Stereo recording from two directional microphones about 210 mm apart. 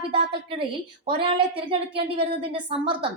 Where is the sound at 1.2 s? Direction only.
25° right (ahead or behind).